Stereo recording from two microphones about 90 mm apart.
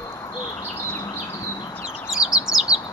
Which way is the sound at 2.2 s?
45° left (ahead or behind).